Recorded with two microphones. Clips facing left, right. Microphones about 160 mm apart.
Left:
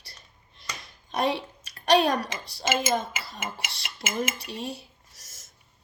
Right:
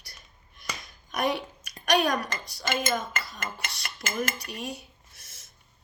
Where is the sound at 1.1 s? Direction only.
30° left (ahead or behind).